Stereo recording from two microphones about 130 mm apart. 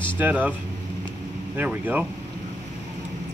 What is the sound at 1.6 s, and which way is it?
Speech, 10° right (ahead or behind).